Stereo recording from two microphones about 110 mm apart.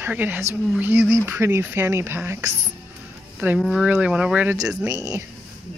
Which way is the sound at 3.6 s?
Centre (ahead or behind).